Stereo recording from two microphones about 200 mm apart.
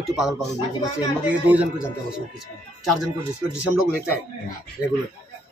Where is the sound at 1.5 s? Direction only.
5° right (ahead or behind).